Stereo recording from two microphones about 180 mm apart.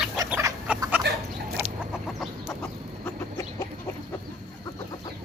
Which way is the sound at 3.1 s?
20° left (ahead or behind).